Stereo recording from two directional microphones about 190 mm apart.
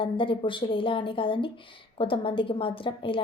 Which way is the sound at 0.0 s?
25° left (ahead or behind).